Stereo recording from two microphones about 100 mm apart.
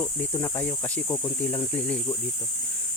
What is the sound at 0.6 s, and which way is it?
Speech, 15° left (ahead or behind).